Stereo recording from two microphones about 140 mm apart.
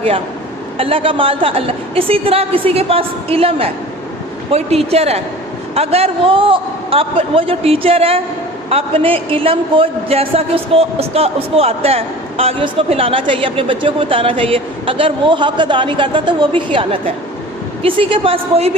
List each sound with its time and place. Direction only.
0.8 s a woman's voice: 40° right (ahead or behind)